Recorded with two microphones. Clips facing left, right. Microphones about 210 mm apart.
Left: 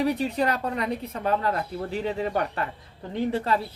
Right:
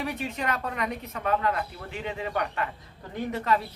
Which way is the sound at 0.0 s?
35° left (ahead or behind).